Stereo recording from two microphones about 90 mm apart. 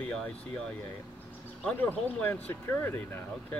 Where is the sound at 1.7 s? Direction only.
20° left (ahead or behind).